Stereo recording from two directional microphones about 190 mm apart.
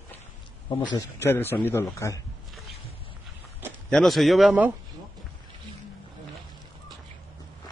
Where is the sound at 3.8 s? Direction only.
Centre (ahead or behind).